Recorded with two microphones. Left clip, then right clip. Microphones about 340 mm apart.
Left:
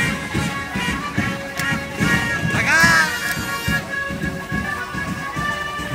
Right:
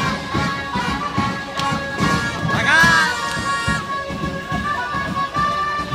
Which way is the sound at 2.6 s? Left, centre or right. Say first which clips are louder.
Right 1 dB; centre.